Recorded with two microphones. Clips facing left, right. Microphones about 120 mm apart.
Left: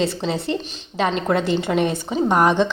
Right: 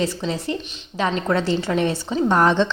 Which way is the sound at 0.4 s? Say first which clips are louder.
Left 2 dB; 25° left (ahead or behind).